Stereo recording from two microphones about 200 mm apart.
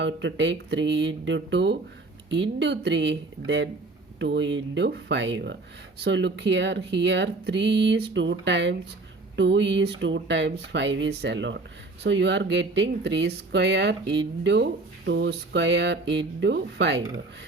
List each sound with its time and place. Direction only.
0.0 s speech: 60° right (ahead or behind)